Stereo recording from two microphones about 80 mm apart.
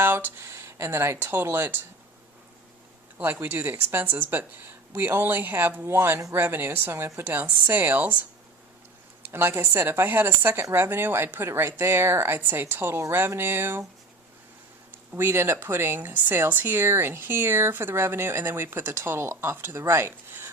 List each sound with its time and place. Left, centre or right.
0.0 s speech: right
3.2 s speech: right
9.2 s speech: right
15.1 s speech: right